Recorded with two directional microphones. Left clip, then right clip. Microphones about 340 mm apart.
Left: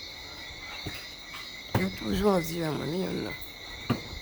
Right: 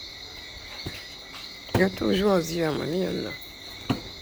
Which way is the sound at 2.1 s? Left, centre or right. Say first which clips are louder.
Right 4 dB; centre.